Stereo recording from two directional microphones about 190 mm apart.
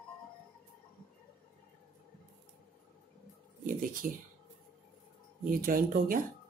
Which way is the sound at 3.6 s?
45° right (ahead or behind).